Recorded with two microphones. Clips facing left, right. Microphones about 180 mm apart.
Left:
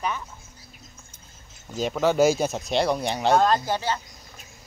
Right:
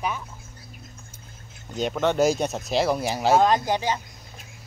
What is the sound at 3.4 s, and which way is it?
Speech, 15° right (ahead or behind).